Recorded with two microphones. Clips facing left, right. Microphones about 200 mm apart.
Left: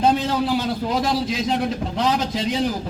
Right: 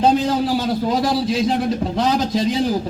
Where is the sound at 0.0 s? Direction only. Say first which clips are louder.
Right 3 dB; 40° right (ahead or behind).